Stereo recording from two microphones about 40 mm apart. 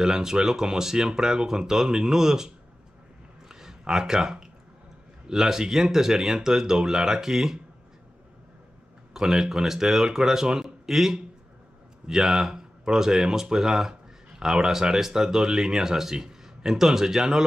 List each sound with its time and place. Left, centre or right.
0.0 s speech: centre
3.4 s a sound: centre
5.3 s speech: centre
9.1 s speech: centre